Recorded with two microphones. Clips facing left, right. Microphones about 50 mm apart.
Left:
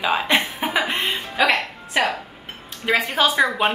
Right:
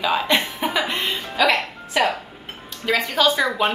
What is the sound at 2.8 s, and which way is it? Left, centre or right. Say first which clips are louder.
Speech: even; left.